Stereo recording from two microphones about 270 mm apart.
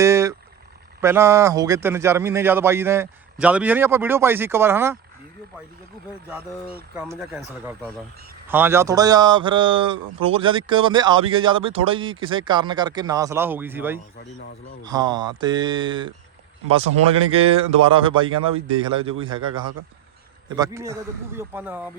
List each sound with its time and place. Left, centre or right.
0.0 s vehicle: centre
1.0 s a man's voice: centre
6.9 s a man's voice: centre
17.3 s a man's voice: right